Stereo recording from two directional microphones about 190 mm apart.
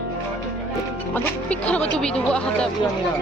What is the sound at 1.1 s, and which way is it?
A woman's voice, 5° left (ahead or behind).